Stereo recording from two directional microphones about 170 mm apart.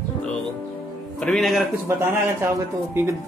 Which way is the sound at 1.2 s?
Centre (ahead or behind).